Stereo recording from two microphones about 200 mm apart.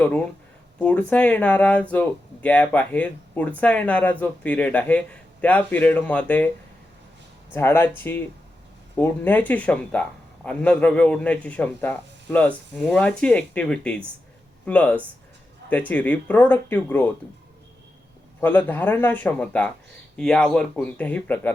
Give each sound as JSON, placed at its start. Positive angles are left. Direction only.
{"t": 0.8, "sound": "a man's voice", "side_deg": 5}
{"t": 7.5, "sound": "a man's voice", "side_deg": 10}
{"t": 18.3, "sound": "a man's voice", "side_deg": 10}